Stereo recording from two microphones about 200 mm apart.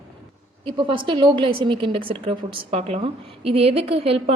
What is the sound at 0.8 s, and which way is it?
A woman's voice, 25° right (ahead or behind).